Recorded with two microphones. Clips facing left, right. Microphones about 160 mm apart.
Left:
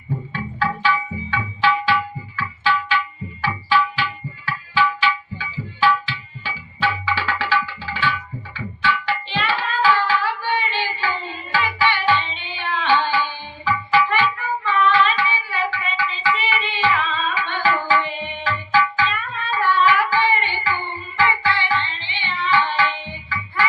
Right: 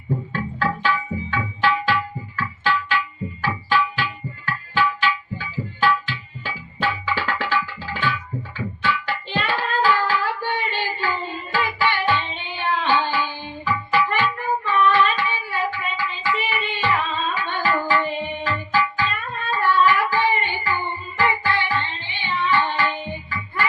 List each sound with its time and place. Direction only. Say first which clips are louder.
0.3 s tabla: left 2 dB; 50° right (ahead or behind)
3.4 s music: left 2 dB; 50° right (ahead or behind)
8.5 s hands: left 2 dB; 45° right (ahead or behind)
11.5 s music: left 1 dB; 50° right (ahead or behind)